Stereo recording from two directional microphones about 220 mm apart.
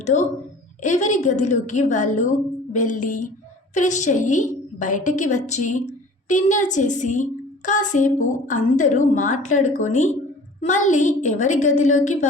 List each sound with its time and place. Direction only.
0.0 s a woman's voice: 30° left (ahead or behind)